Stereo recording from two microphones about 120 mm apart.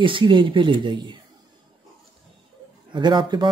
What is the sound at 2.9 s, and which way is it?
Speech, 40° right (ahead or behind).